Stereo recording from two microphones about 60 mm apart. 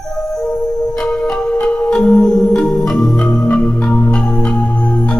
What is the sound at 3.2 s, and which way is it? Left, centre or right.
Music, left.